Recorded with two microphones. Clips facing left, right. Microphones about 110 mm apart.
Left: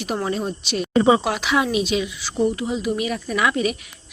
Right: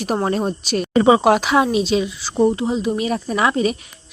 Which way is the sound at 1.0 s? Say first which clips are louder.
Right 7 dB; 60° right (ahead or behind).